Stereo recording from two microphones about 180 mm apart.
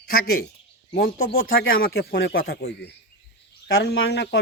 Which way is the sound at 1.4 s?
90° left.